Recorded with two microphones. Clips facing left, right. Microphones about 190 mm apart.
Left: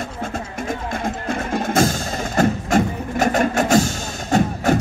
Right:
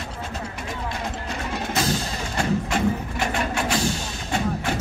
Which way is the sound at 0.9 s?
50° left (ahead or behind).